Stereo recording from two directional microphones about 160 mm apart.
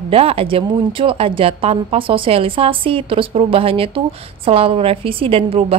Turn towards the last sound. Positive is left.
turn(degrees=-40)  # may be behind; listen again after turning